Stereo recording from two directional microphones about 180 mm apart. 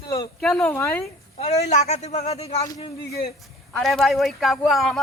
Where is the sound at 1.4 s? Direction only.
35° left (ahead or behind).